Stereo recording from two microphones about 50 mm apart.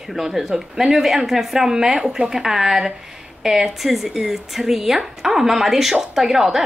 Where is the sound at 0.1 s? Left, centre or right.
Centre.